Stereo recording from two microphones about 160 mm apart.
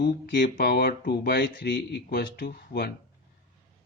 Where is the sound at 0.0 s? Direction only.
90° left.